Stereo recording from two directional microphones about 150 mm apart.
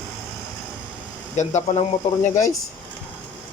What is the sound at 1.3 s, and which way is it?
Speech, 50° left (ahead or behind).